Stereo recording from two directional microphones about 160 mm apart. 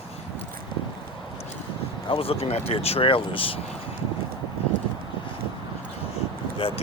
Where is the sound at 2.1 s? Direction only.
35° left (ahead or behind).